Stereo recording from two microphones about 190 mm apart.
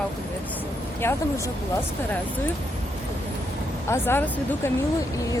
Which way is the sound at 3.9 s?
10° left (ahead or behind).